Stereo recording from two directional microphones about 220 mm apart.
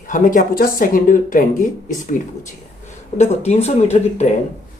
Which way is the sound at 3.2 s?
30° left (ahead or behind).